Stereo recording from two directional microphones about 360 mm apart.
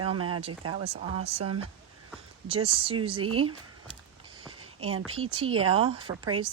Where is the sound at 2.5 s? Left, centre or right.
Centre.